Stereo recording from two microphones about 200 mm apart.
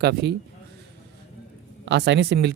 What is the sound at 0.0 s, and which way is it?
Speech, 55° right (ahead or behind).